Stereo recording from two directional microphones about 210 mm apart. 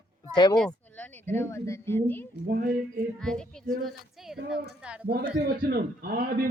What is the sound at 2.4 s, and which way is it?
Speech, 40° right (ahead or behind).